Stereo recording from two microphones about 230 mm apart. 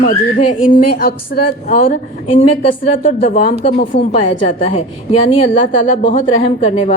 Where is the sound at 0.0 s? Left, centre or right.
Left.